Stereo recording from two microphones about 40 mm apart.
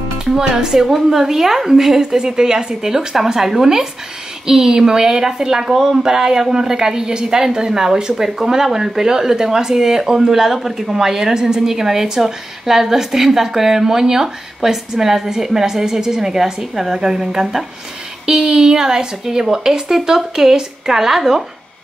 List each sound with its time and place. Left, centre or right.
0.2 s a woman's voice: centre